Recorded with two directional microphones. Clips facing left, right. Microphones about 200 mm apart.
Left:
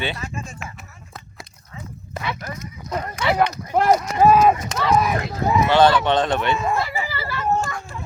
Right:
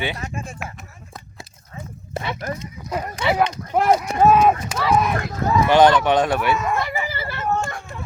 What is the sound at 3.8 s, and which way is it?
Speech, 5° right (ahead or behind).